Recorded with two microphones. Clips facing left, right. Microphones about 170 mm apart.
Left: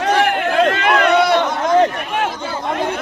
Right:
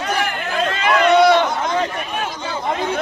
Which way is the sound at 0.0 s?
75° left (ahead or behind).